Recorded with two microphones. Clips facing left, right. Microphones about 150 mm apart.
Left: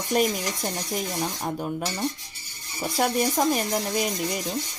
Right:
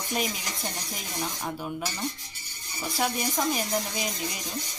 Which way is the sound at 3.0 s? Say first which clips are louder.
Left 5 dB; 45° left (ahead or behind).